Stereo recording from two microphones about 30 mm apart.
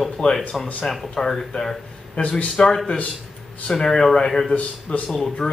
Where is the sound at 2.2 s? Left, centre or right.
Left.